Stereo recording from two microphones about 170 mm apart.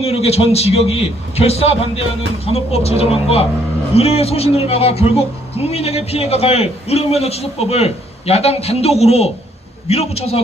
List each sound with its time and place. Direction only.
0.0 s speech: 35° left (ahead or behind)